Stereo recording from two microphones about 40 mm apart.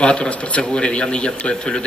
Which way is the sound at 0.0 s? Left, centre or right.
Left.